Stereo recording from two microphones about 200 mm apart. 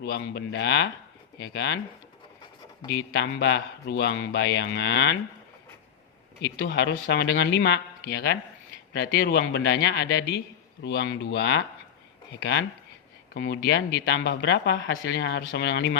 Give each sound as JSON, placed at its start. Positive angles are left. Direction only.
{"t": 0.0, "sound": "speech", "side_deg": 55}
{"t": 3.2, "sound": "speech", "side_deg": 65}
{"t": 6.7, "sound": "speech", "side_deg": 60}
{"t": 8.1, "sound": "speech", "side_deg": 45}